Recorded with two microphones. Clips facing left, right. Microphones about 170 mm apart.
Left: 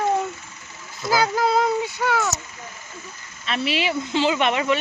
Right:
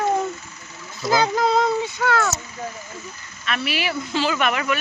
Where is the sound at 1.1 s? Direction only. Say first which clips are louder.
Right 1 dB; 5° left (ahead or behind).